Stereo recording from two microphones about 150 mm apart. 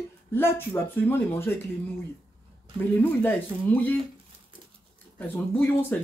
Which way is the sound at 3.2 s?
10° left (ahead or behind).